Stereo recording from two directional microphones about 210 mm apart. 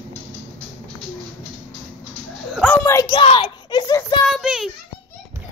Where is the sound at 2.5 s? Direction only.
5° left (ahead or behind).